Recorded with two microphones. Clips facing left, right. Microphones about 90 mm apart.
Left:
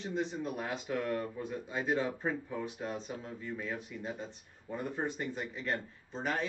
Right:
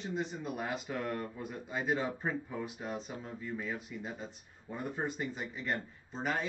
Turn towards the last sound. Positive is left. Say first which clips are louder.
# even
turn(degrees=0)  # may be behind; listen again after turning